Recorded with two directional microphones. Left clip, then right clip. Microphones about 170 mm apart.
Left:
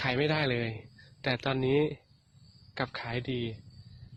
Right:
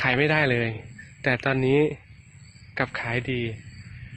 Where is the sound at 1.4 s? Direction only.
5° left (ahead or behind).